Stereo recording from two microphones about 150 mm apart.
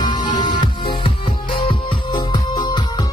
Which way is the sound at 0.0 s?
30° left (ahead or behind).